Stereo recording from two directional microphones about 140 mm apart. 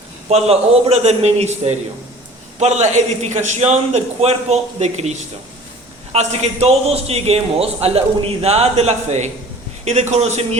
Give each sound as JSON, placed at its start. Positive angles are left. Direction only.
{"t": 0.3, "sound": "a man's voice", "side_deg": -45}
{"t": 6.1, "sound": "a man's voice", "side_deg": -50}